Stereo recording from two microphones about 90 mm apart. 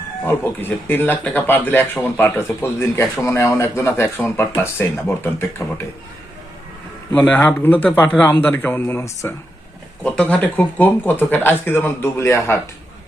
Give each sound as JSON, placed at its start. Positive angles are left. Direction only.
{"t": 0.3, "sound": "speech", "side_deg": 20}
{"t": 7.1, "sound": "speech", "side_deg": 20}
{"t": 10.0, "sound": "speech", "side_deg": 15}